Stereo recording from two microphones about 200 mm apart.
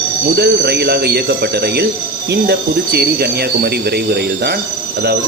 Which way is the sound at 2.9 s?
55° right (ahead or behind).